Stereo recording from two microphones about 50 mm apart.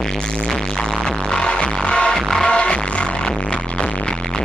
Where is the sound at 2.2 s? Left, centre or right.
Centre.